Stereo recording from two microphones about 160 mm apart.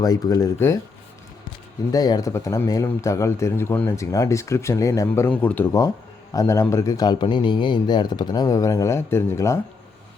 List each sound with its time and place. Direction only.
0.0 s a man's voice: 25° left (ahead or behind)
1.9 s a man's voice: 25° left (ahead or behind)